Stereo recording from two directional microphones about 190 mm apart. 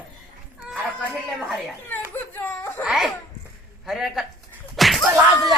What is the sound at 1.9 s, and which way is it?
Baby cry, 10° left (ahead or behind).